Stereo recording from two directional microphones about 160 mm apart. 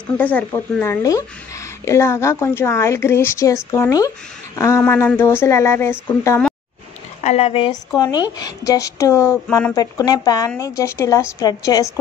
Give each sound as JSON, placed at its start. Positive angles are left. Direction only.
{"t": 0.0, "sound": "a woman's voice", "side_deg": 10}
{"t": 7.2, "sound": "speech", "side_deg": 40}
{"t": 9.8, "sound": "speech", "side_deg": 25}